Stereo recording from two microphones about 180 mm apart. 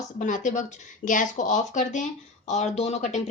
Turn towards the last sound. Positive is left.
turn(degrees=40)  # may be behind; listen again after turning